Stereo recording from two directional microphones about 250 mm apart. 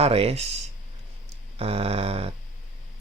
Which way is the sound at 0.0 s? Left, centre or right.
Right.